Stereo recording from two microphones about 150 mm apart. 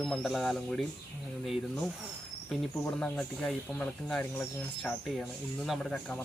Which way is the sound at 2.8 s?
5° left (ahead or behind).